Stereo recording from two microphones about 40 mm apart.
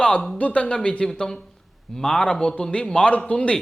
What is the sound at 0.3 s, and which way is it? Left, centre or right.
A man's voice, left.